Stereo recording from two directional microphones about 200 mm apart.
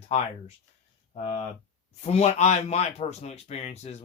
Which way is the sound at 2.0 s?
30° left (ahead or behind).